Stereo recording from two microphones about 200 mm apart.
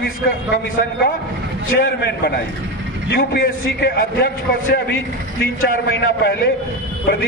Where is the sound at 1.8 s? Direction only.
50° left (ahead or behind).